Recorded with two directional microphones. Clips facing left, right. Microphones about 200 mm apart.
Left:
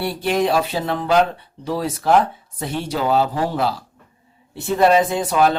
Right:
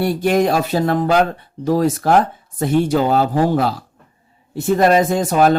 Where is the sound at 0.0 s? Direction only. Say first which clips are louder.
Right 4 dB; 45° right (ahead or behind).